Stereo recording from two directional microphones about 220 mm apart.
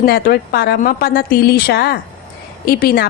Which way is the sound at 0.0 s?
45° left (ahead or behind).